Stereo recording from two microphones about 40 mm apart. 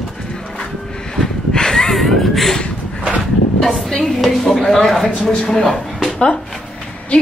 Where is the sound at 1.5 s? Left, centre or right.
Centre.